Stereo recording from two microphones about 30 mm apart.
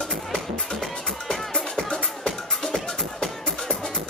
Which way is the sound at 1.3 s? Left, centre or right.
Left.